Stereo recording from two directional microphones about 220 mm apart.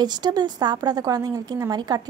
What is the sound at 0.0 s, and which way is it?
A woman's voice, 20° right (ahead or behind).